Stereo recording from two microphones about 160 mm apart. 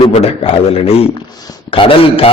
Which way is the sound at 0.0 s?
40° left (ahead or behind).